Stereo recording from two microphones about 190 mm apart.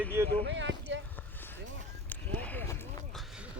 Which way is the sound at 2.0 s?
10° left (ahead or behind).